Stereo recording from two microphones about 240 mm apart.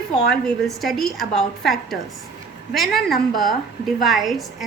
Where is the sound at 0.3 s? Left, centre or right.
Centre.